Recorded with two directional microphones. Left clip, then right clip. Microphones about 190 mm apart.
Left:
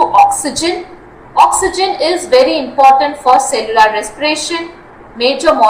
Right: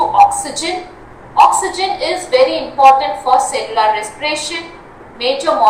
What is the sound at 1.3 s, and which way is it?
A woman's voice, 30° left (ahead or behind).